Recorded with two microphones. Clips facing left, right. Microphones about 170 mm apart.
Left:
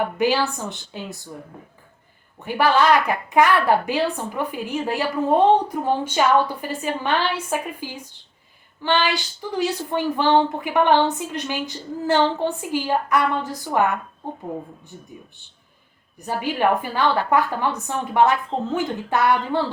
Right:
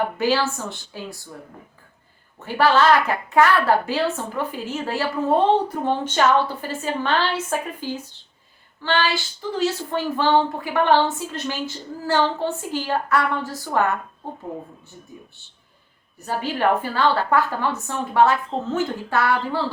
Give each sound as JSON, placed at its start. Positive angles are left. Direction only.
{"t": 0.2, "sound": "a woman's voice", "side_deg": 15}
{"t": 2.4, "sound": "a woman's voice", "side_deg": 15}
{"t": 16.1, "sound": "a woman's voice", "side_deg": 15}